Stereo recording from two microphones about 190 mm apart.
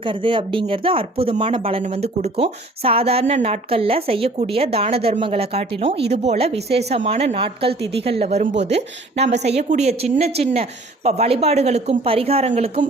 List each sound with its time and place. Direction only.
0.0 s speech: 25° right (ahead or behind)